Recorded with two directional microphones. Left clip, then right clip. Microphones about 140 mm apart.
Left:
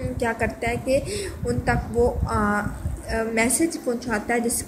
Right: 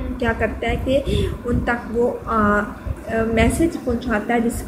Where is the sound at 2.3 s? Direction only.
45° left (ahead or behind).